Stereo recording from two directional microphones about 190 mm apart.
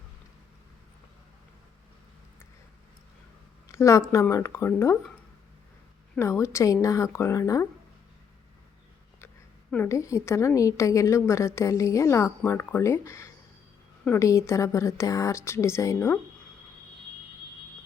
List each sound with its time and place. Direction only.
3.7 s a woman's voice: 15° left (ahead or behind)
6.1 s a woman's voice: 15° left (ahead or behind)
9.7 s a woman's voice: 15° left (ahead or behind)